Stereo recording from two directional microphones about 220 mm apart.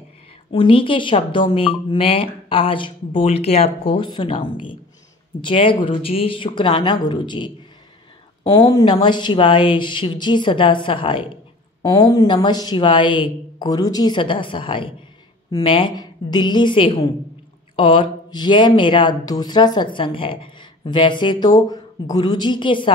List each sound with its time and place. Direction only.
0.5 s speech: 25° left (ahead or behind)